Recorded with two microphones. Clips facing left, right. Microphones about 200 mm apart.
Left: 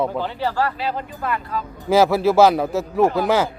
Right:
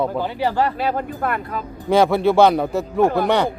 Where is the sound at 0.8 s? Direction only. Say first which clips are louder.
Right 4 dB; 50° right (ahead or behind).